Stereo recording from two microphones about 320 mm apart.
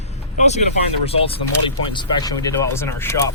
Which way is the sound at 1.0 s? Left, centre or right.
Centre.